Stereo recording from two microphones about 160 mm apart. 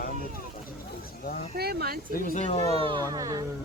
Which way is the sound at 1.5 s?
75° right (ahead or behind).